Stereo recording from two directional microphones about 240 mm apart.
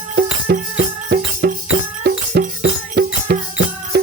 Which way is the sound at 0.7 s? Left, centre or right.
Right.